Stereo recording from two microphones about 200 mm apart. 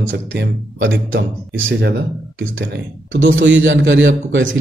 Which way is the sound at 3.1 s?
70° right (ahead or behind).